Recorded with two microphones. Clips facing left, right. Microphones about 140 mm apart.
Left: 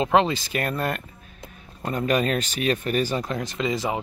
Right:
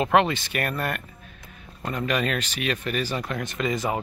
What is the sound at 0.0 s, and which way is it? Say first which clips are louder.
Speech: left 1 dB; 25° left (ahead or behind).